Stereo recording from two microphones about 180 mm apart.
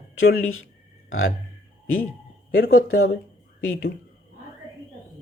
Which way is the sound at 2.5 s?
55° left (ahead or behind).